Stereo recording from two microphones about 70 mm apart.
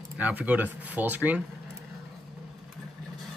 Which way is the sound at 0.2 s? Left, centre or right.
Right.